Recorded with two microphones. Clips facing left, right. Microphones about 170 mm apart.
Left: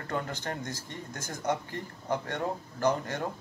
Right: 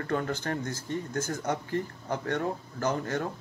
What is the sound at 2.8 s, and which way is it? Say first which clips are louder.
Speech: left 1 dB; 15° left (ahead or behind).